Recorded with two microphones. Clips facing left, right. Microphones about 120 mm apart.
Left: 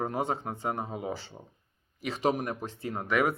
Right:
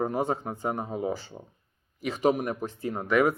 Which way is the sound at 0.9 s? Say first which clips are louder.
Right 5 dB; 30° right (ahead or behind).